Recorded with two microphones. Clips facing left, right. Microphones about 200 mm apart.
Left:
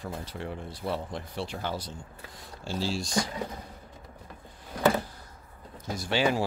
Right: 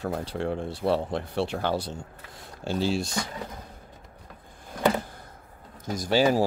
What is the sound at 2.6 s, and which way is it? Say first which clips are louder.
Speech: right 5 dB; 60° right (ahead or behind).